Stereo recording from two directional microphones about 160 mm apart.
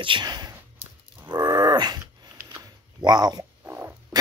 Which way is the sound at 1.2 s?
25° right (ahead or behind).